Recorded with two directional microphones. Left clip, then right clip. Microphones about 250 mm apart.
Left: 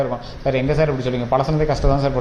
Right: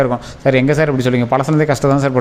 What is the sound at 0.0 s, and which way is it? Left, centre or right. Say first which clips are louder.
A man's voice: right 7 dB; right.